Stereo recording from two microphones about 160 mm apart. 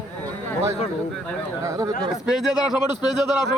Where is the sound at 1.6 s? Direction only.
20° right (ahead or behind).